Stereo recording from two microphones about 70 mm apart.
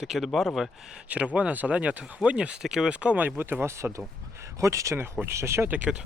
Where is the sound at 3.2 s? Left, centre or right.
Right.